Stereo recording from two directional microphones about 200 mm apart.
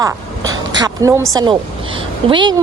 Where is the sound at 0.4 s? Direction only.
85° right.